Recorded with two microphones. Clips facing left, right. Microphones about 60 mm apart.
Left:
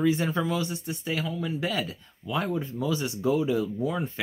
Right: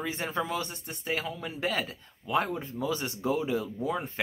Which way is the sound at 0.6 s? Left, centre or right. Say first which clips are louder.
Left 5 dB; right.